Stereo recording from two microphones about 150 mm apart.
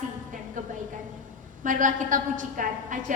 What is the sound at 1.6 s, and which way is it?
A woman's voice, 60° right (ahead or behind).